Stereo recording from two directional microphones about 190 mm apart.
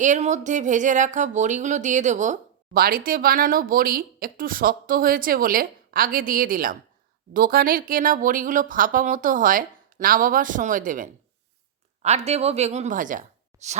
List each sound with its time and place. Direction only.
0.0 s speech: 40° right (ahead or behind)